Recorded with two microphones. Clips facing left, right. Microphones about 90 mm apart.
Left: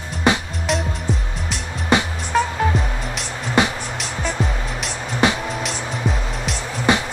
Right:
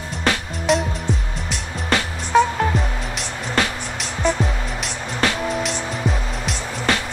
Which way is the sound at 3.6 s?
15° left (ahead or behind).